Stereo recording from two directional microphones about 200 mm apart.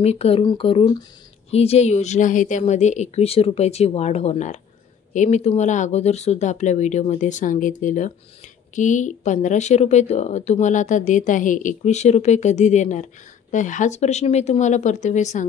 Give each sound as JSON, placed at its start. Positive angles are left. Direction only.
{"t": 0.0, "sound": "a woman's voice", "side_deg": 30}